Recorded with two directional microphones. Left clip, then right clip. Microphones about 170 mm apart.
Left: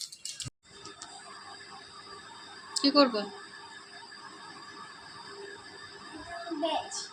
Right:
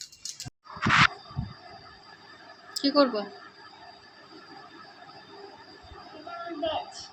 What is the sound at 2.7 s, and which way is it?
Speech, centre (ahead or behind).